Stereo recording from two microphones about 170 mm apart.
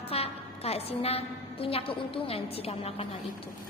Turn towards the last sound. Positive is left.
turn(degrees=35)  # may be behind; listen again after turning